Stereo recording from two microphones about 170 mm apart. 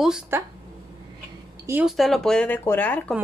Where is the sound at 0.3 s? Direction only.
15° right (ahead or behind).